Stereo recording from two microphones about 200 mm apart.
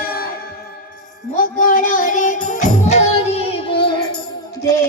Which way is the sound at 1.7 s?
40° left (ahead or behind).